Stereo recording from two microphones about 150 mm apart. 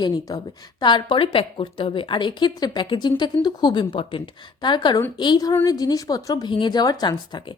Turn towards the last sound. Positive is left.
turn(degrees=30)  # may be behind; listen again after turning